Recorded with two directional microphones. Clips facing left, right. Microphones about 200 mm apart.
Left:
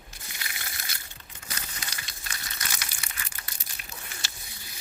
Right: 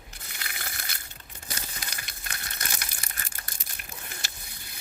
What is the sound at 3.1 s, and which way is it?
Crushing, 45° right (ahead or behind).